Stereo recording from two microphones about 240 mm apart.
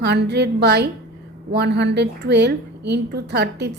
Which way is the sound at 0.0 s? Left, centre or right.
Right.